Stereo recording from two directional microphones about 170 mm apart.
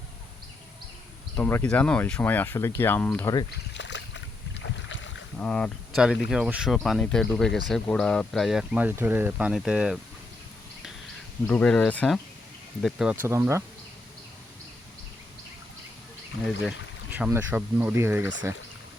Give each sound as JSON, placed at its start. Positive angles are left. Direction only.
{"t": 1.4, "sound": "speech", "side_deg": 10}
{"t": 3.8, "sound": "boat", "side_deg": 90}
{"t": 5.4, "sound": "speech", "side_deg": 5}
{"t": 6.3, "sound": "speech", "side_deg": -5}
{"t": 11.4, "sound": "speech", "side_deg": 5}
{"t": 13.2, "sound": "speech", "side_deg": -15}
{"t": 16.6, "sound": "speech", "side_deg": -10}